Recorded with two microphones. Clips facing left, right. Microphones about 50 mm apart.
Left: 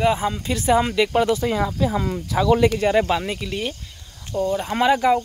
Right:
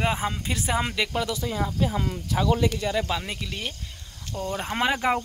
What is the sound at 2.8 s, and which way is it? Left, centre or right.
Speech, left.